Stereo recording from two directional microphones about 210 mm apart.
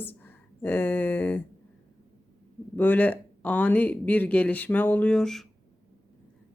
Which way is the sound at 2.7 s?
10° left (ahead or behind).